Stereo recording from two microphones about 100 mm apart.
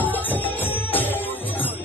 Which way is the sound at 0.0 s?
20° left (ahead or behind).